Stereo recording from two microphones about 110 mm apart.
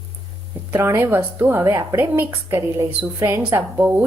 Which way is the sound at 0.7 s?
20° right (ahead or behind).